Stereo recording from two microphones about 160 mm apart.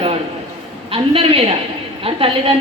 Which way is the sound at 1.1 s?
35° right (ahead or behind).